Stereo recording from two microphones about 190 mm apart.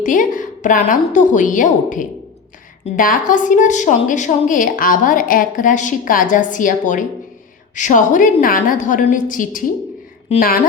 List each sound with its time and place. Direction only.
0.0 s a woman's voice: 45° left (ahead or behind)